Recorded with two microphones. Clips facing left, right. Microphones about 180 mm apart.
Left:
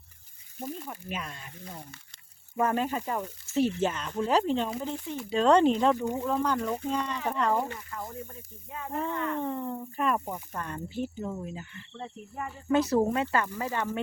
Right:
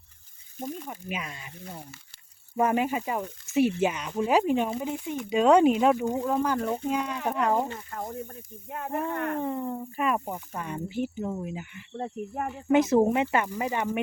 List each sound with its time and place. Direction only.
0.6 s speech: 10° right (ahead or behind)
2.6 s speech: 15° right (ahead or behind)
7.9 s speech: 45° right (ahead or behind)
8.7 s speech: 60° right (ahead or behind)
9.4 s speech: 10° right (ahead or behind)
11.9 s speech: 50° right (ahead or behind)
12.7 s speech: 20° right (ahead or behind)